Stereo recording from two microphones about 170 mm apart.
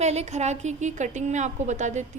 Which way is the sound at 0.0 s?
40° right (ahead or behind).